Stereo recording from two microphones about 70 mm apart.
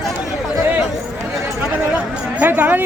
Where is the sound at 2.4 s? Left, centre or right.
Right.